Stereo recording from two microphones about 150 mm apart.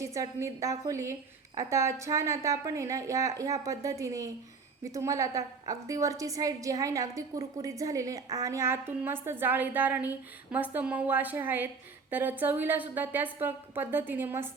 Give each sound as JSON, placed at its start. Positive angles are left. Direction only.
{"t": 0.0, "sound": "a woman's voice", "side_deg": -20}